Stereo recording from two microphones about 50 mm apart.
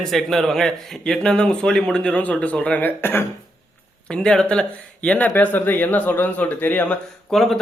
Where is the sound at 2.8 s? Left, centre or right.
Left.